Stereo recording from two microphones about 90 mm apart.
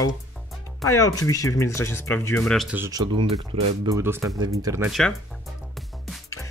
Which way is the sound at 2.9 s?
55° right (ahead or behind).